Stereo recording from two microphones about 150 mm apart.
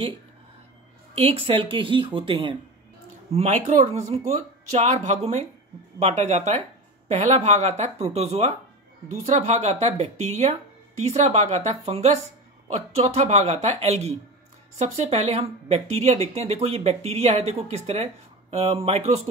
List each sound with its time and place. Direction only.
1.1 s a woman's voice: 40° right (ahead or behind)
3.3 s speech: 50° right (ahead or behind)